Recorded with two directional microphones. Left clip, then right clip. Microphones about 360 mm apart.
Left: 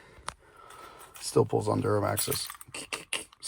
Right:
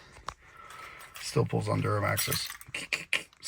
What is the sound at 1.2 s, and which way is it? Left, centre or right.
Speech, centre.